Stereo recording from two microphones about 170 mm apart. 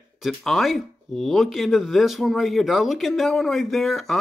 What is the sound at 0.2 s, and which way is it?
Speech, centre (ahead or behind).